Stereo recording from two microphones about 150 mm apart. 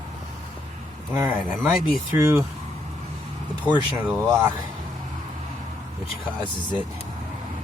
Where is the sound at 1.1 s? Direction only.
15° right (ahead or behind).